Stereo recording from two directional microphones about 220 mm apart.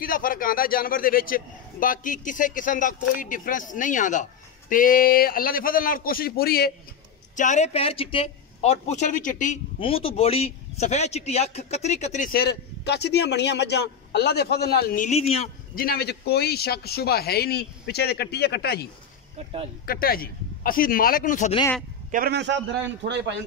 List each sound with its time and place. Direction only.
0.0 s a man's voice: 40° left (ahead or behind)
7.3 s a man's voice: 35° left (ahead or behind)
9.8 s a man's voice: 25° left (ahead or behind); by 15.0 s 45° left (ahead or behind)
15.0 s a man's voice: 30° left (ahead or behind); by 18.9 s 45° left (ahead or behind)
19.3 s speech: 25° right (ahead or behind)
19.9 s a man's voice: 40° left (ahead or behind)
22.1 s a man's voice: 45° right (ahead or behind)